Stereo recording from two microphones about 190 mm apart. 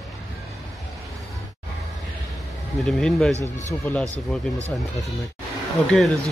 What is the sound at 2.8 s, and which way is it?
Speech, centre (ahead or behind).